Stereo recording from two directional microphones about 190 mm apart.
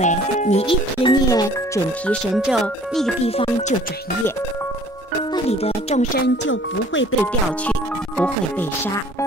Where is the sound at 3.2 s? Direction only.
30° left (ahead or behind).